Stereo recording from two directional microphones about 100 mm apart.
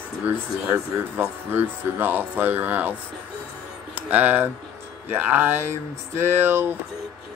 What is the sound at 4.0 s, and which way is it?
Speech, 15° right (ahead or behind).